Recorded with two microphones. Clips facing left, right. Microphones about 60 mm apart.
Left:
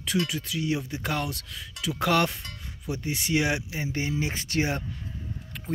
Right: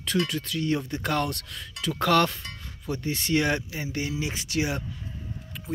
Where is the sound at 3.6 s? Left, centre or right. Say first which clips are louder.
Left 1 dB; left.